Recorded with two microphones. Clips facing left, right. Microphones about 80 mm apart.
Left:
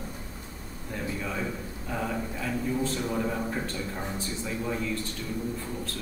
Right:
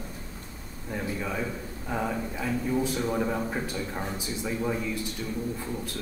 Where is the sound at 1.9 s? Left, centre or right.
Centre.